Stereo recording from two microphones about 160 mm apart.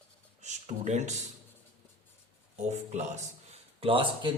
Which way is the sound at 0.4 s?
45° right (ahead or behind).